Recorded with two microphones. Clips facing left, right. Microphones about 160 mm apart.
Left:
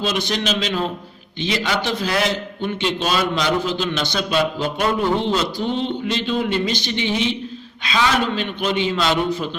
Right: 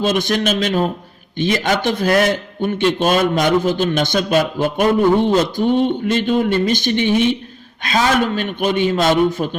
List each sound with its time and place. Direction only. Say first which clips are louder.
0.0 s a man's voice: right 5 dB; 50° right (ahead or behind)